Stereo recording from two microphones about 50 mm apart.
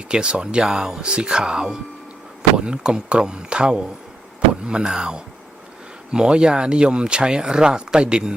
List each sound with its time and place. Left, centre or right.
0.1 s speech: centre